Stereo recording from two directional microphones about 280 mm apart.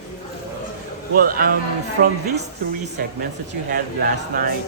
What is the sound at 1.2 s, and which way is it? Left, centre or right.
Speech, right.